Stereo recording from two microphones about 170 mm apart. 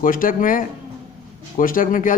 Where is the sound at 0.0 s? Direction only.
55° left (ahead or behind).